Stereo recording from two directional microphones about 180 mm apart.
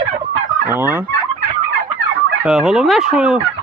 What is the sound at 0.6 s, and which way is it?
Turkey, 10° right (ahead or behind).